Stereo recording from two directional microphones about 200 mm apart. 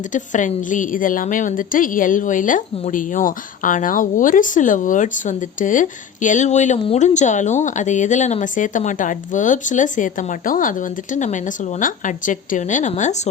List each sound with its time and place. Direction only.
0.1 s a woman's voice: 40° left (ahead or behind)